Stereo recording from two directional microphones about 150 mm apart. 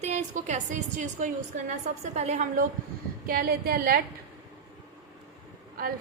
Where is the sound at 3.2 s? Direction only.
80° right.